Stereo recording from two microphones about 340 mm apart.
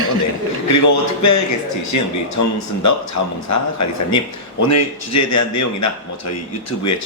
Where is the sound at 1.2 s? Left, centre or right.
Left.